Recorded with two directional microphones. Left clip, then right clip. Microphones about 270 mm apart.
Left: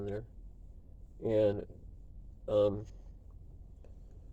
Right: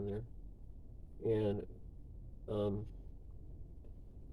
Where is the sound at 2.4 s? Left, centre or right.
Left.